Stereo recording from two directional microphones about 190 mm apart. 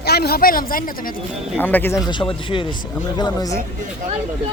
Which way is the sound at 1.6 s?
10° left (ahead or behind).